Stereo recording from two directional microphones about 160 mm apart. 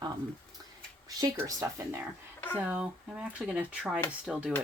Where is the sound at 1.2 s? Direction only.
25° right (ahead or behind).